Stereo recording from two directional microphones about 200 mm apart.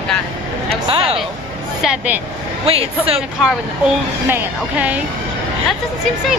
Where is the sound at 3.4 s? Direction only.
5° right (ahead or behind).